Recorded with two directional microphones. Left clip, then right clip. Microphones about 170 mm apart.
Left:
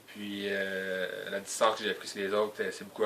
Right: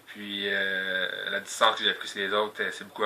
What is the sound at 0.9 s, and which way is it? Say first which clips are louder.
Speech: right 5 dB; 25° left (ahead or behind).